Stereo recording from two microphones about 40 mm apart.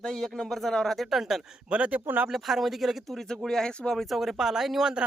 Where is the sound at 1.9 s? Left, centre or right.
Right.